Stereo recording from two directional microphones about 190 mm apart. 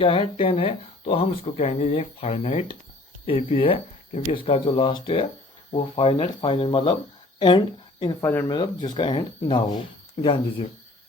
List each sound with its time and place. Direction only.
0.0 s speech: 30° left (ahead or behind)
8.2 s speech: 10° left (ahead or behind)
8.5 s speech: 25° left (ahead or behind)